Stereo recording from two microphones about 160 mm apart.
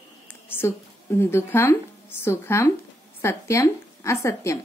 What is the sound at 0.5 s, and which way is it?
A woman's voice, 15° left (ahead or behind).